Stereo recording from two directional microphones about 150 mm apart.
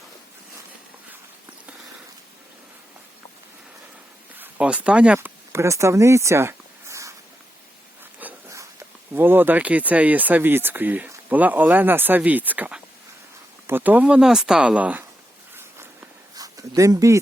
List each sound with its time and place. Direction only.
4.4 s speech: 10° right (ahead or behind)
8.2 s speech: 20° right (ahead or behind)
16.3 s a sound: 25° right (ahead or behind)